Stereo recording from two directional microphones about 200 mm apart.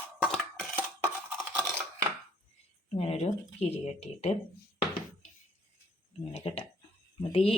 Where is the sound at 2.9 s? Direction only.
30° left (ahead or behind).